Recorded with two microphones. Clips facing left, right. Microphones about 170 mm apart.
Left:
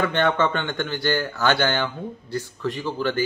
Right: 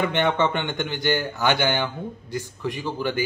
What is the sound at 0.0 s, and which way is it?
Speech, 20° right (ahead or behind).